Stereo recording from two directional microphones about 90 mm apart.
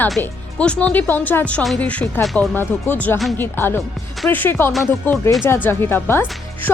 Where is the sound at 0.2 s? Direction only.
25° left (ahead or behind).